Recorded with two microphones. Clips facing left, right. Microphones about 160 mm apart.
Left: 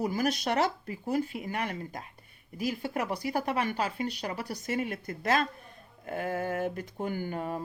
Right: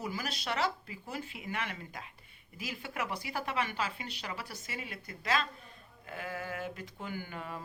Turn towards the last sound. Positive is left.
turn(degrees=45)  # may be behind; listen again after turning